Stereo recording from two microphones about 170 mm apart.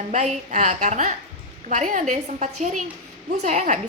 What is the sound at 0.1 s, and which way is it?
A woman's voice, 45° right (ahead or behind).